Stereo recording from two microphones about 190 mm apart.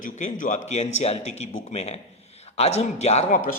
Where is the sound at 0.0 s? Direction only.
40° left (ahead or behind).